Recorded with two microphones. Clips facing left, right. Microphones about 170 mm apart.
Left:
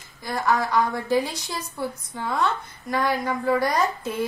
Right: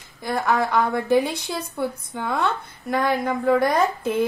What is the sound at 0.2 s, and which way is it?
A woman's voice, 55° right (ahead or behind).